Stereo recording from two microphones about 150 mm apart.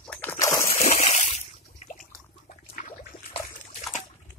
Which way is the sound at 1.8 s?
45° left (ahead or behind).